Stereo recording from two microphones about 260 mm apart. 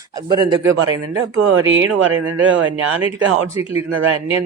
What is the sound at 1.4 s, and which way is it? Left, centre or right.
Speech, right.